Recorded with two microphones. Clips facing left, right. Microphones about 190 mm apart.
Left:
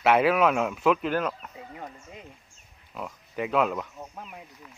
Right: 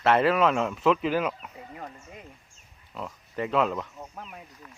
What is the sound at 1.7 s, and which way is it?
Speech, 20° left (ahead or behind).